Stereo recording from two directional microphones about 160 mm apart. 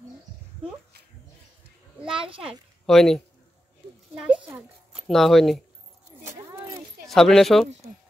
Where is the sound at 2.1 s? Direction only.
35° right (ahead or behind).